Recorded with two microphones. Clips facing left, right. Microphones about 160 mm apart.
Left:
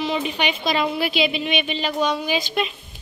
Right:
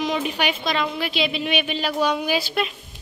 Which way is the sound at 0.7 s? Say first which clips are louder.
Left 3 dB; 10° left (ahead or behind).